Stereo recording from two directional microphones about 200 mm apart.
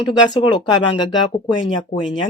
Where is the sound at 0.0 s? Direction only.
20° left (ahead or behind).